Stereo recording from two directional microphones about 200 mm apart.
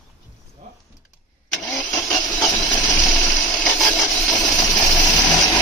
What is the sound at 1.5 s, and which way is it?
Vehicle, 5° left (ahead or behind).